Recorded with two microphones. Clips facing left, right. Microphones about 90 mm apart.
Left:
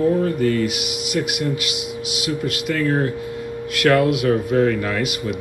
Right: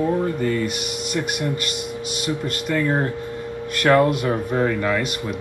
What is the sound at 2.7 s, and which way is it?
Speech, 25° right (ahead or behind).